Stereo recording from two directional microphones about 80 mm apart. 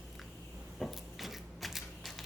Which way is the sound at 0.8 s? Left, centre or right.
Centre.